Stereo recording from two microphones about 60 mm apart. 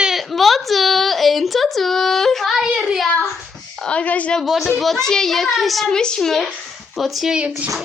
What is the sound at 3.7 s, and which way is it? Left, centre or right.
Speech, centre.